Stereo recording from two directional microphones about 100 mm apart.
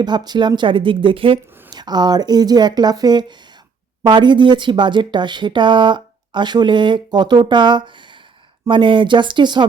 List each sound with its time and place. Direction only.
0.0 s speech: 45° right (ahead or behind); by 1.4 s 65° right (ahead or behind)
1.7 s speech: 45° right (ahead or behind)